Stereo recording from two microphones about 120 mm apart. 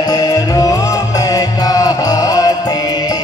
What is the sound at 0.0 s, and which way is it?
Music, 35° left (ahead or behind).